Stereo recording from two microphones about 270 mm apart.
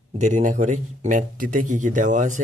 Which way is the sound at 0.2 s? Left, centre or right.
Right.